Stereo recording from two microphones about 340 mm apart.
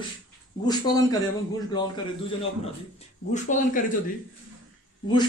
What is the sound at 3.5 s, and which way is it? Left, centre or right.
Speech, left.